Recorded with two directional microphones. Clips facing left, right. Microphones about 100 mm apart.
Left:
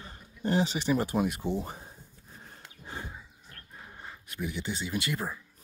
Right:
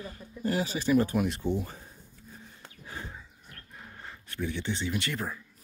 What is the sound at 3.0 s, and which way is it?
Dog, 15° left (ahead or behind).